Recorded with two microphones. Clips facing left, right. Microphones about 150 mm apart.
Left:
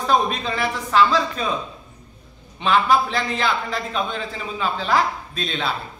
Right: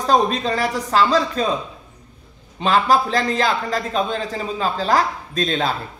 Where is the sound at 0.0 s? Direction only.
40° right (ahead or behind).